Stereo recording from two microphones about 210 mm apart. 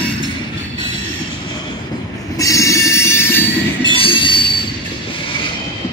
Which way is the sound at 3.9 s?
25° left (ahead or behind).